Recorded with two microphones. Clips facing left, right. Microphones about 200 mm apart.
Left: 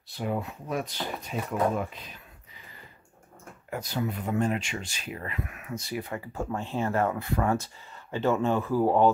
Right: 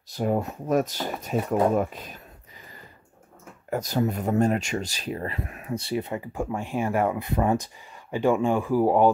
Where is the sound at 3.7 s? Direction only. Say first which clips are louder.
Right 6 dB; 40° right (ahead or behind).